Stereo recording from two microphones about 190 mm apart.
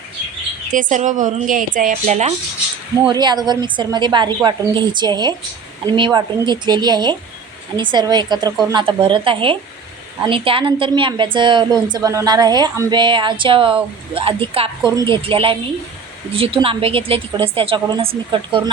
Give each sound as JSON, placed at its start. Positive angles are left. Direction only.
{"t": 0.7, "sound": "a woman's voice", "side_deg": -45}
{"t": 3.1, "sound": "a woman's voice", "side_deg": -20}